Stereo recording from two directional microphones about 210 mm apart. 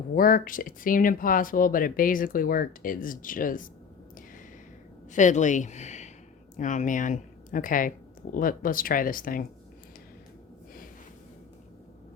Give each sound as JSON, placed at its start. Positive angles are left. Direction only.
{"t": 0.1, "sound": "speech", "side_deg": 40}
{"t": 5.1, "sound": "speech", "side_deg": 35}